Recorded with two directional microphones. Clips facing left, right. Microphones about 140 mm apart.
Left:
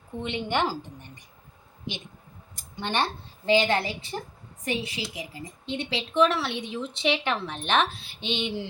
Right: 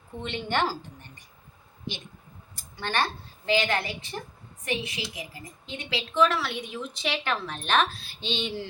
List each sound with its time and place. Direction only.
0.2 s a woman's voice: 15° left (ahead or behind)
2.6 s a woman's voice: 20° left (ahead or behind)